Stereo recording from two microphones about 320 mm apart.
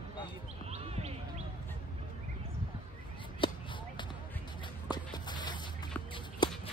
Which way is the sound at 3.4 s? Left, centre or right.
Centre.